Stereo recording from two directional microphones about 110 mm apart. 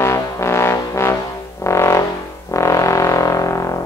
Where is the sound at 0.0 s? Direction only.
25° left (ahead or behind).